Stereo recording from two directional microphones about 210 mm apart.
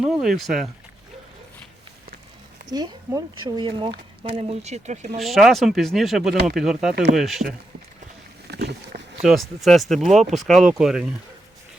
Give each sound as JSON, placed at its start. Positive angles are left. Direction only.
{"t": 0.0, "sound": "speech", "side_deg": 0}
{"t": 2.6, "sound": "speech", "side_deg": -20}
{"t": 5.2, "sound": "speech", "side_deg": 0}
{"t": 8.4, "sound": "vehicle", "side_deg": -50}
{"t": 9.2, "sound": "speech", "side_deg": 0}